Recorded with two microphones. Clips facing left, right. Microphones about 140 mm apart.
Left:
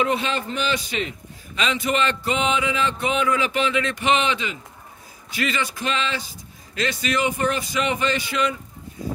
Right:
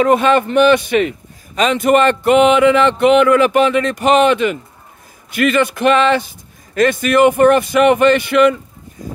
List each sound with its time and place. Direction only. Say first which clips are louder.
0.0 s a man's voice: right 11 dB; 50° right (ahead or behind)
1.5 s a man's voice: right 11 dB; 45° right (ahead or behind)